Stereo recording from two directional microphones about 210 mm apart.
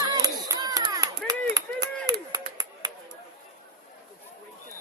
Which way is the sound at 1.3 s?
15° right (ahead or behind).